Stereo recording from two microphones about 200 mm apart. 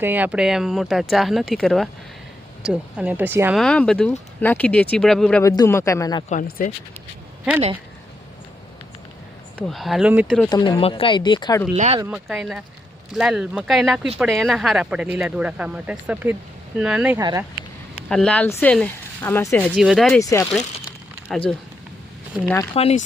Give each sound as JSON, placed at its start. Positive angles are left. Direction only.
{"t": 0.0, "sound": "speech", "side_deg": -10}
{"t": 3.6, "sound": "speech", "side_deg": 5}
{"t": 5.4, "sound": "speech", "side_deg": 15}
{"t": 6.2, "sound": "speech", "side_deg": 35}
{"t": 9.6, "sound": "speech", "side_deg": 0}
{"t": 10.5, "sound": "speech", "side_deg": 25}
{"t": 12.1, "sound": "speech", "side_deg": -5}
{"t": 17.2, "sound": "speech", "side_deg": -15}
{"t": 17.9, "sound": "speech", "side_deg": 5}
{"t": 19.7, "sound": "speech", "side_deg": 0}
{"t": 20.2, "sound": "speech", "side_deg": 15}
{"t": 21.3, "sound": "speech", "side_deg": 5}
{"t": 22.7, "sound": "speech", "side_deg": 30}